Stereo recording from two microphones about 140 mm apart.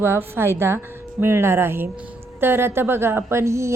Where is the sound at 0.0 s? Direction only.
15° right (ahead or behind).